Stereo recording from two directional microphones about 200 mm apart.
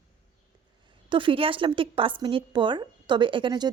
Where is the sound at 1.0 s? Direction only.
25° right (ahead or behind).